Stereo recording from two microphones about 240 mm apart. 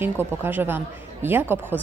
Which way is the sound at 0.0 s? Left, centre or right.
Centre.